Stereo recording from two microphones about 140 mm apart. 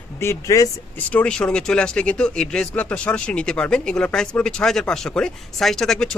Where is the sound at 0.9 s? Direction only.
10° left (ahead or behind).